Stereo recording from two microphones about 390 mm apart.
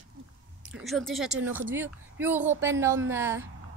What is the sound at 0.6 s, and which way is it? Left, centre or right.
A woman's voice, centre.